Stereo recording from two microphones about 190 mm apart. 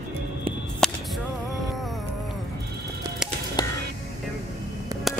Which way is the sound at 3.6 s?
20° left (ahead or behind).